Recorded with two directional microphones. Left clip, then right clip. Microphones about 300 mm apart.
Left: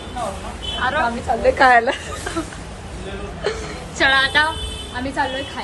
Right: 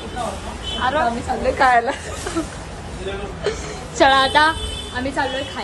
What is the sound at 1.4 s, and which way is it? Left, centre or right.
Speech, left.